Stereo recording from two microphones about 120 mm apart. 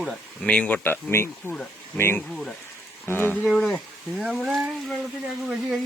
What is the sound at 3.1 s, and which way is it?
Speech, 15° left (ahead or behind).